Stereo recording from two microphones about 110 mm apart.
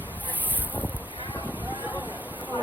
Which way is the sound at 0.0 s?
15° right (ahead or behind).